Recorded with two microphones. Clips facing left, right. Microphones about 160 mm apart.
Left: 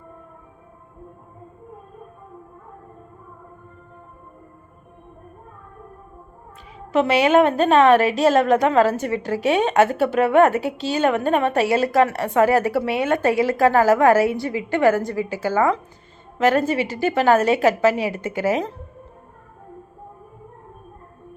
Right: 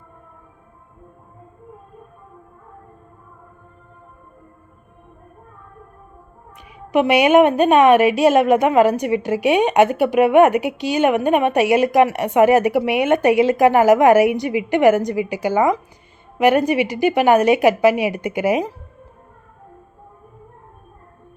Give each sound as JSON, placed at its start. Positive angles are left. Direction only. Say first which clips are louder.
{"t": 6.7, "sound": "a woman's voice", "louder": "right 3 dB", "side_deg": -15}